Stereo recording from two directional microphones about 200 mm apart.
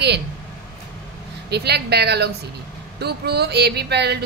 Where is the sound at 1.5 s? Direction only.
55° right (ahead or behind).